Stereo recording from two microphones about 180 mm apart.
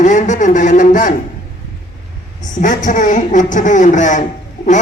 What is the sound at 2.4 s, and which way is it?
A man's voice, 45° left (ahead or behind).